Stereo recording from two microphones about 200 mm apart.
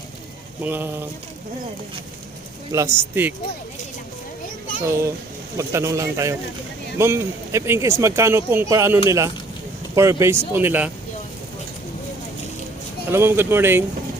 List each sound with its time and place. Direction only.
0.6 s speech: 10° right (ahead or behind)
2.7 s speech: 10° right (ahead or behind)
4.8 s speech: 15° right (ahead or behind)
13.1 s speech: 10° right (ahead or behind)